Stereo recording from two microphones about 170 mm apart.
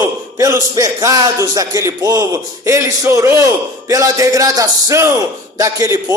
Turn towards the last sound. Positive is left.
turn(degrees=-15)  # may be behind; listen again after turning